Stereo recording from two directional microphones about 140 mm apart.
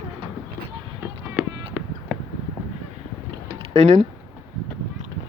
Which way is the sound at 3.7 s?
50° right (ahead or behind).